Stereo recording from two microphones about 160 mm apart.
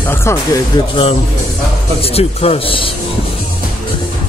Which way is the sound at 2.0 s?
40° left (ahead or behind).